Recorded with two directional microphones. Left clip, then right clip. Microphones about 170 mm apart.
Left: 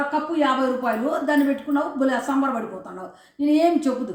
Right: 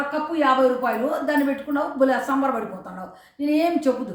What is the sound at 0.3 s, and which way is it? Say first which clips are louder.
A woman's voice: right 5 dB; 20° right (ahead or behind).